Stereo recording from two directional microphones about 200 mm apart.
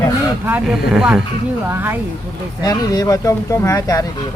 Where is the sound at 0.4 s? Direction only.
10° right (ahead or behind).